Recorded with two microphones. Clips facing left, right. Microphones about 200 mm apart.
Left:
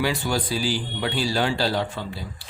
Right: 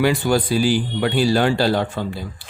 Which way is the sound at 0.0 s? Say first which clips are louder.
Right 7 dB; 55° right (ahead or behind).